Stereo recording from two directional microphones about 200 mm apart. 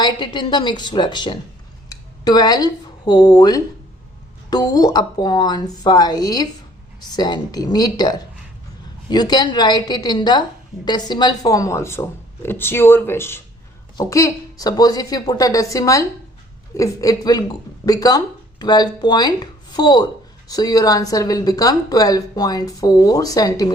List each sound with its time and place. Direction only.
0.0 s a woman's voice: 20° left (ahead or behind)